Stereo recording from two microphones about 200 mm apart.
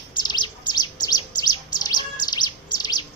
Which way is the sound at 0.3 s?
20° left (ahead or behind).